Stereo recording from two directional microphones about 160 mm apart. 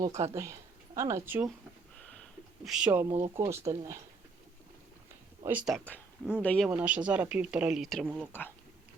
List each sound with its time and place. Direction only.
0.0 s speech: 20° right (ahead or behind)
2.6 s speech: 5° right (ahead or behind)
5.5 s speech: 10° right (ahead or behind)
5.7 s speech: 10° left (ahead or behind)
6.7 s speech: 10° right (ahead or behind)
8.3 s speech: 15° left (ahead or behind)